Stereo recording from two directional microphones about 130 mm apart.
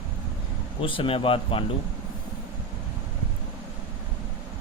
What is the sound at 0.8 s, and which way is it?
Speech, 40° left (ahead or behind).